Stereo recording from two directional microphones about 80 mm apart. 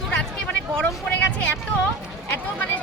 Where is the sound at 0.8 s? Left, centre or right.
Centre.